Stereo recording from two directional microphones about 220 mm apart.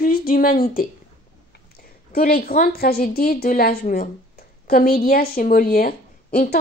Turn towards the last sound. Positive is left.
turn(degrees=40)  # may be behind; listen again after turning